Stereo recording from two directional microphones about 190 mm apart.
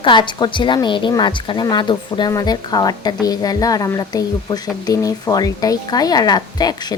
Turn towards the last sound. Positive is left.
turn(degrees=20)  # may be behind; listen again after turning